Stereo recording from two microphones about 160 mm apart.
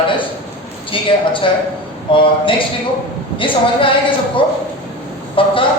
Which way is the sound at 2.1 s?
35° left (ahead or behind).